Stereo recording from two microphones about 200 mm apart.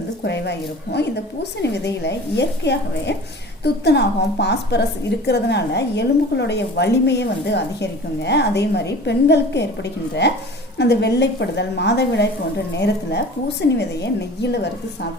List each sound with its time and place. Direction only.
0.3 s a woman's voice: 60° left (ahead or behind)